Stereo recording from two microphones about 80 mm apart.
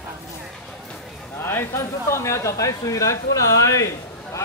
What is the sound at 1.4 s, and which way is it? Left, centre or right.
Speech, left.